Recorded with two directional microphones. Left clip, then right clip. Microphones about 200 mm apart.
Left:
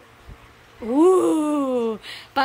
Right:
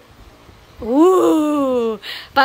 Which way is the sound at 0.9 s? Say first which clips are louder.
Right 4 dB; 5° left (ahead or behind).